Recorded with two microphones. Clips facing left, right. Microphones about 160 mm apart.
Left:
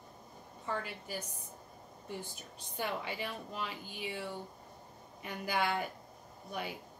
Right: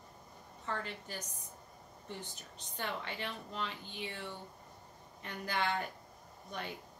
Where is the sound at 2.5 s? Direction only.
10° left (ahead or behind).